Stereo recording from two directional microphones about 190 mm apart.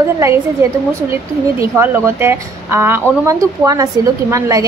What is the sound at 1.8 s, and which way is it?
A woman's voice, 10° right (ahead or behind).